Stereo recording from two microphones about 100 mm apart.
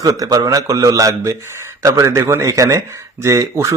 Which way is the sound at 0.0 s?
35° right (ahead or behind).